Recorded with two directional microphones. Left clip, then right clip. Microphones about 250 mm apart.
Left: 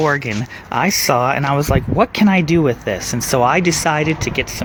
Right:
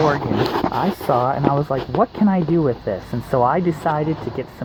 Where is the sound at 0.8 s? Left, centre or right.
Left.